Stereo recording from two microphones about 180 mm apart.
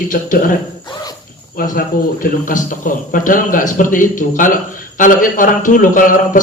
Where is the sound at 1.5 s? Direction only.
50° left (ahead or behind).